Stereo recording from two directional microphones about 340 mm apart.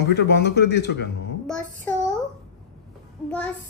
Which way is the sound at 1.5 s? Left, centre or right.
Centre.